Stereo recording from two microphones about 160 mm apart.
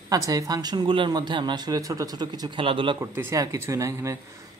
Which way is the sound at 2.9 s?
15° right (ahead or behind).